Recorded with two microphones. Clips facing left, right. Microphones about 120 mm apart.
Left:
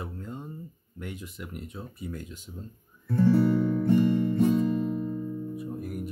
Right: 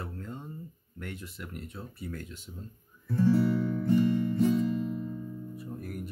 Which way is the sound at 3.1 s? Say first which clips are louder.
Left 3 dB; 55° left (ahead or behind).